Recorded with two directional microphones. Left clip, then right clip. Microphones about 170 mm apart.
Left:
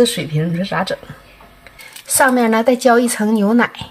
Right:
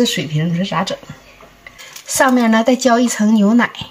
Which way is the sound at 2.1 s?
30° left (ahead or behind).